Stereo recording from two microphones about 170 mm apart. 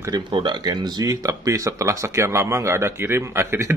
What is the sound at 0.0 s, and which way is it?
Speech, 25° right (ahead or behind).